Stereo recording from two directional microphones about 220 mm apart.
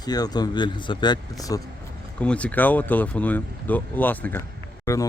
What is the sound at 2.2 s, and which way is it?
Speech, 5° left (ahead or behind).